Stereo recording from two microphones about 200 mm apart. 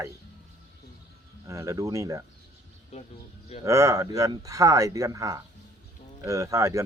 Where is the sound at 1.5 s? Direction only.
15° right (ahead or behind).